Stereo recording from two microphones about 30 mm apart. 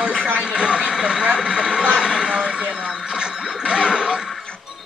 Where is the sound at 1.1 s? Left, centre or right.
Right.